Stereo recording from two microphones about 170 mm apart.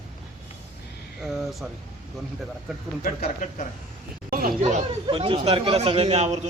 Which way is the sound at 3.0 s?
50° left (ahead or behind).